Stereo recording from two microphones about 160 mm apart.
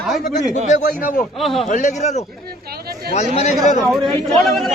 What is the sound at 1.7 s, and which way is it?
Speech, 50° left (ahead or behind).